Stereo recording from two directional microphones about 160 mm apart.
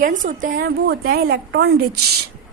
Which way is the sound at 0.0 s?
55° right (ahead or behind).